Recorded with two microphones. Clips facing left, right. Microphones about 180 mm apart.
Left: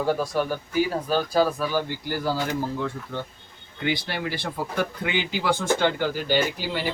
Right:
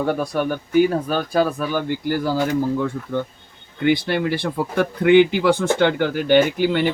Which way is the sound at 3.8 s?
55° right (ahead or behind).